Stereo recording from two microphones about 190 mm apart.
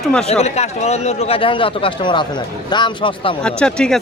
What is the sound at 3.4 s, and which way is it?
Speech, 5° left (ahead or behind).